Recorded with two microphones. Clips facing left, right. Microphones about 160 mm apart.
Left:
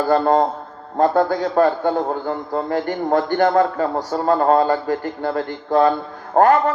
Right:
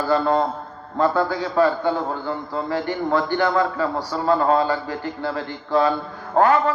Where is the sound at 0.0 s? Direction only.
50° left (ahead or behind).